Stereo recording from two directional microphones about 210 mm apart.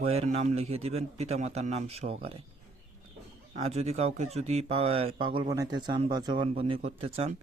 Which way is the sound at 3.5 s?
30° right (ahead or behind).